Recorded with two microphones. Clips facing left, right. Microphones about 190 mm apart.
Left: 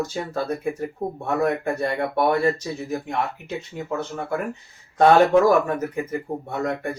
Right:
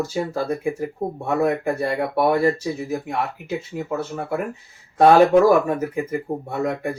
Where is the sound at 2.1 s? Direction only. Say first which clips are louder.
Right 2 dB; 5° right (ahead or behind).